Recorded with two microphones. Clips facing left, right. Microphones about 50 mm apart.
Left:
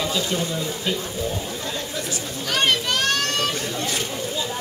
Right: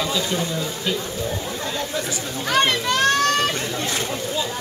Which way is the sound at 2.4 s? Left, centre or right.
Right.